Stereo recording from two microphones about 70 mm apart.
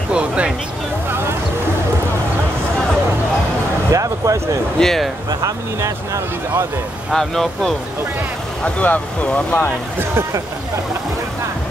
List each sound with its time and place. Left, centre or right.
0.1 s speech: centre
3.9 s a sound: right
4.7 s speech: centre
5.4 s speech: right
7.1 s speech: centre
8.6 s speech: centre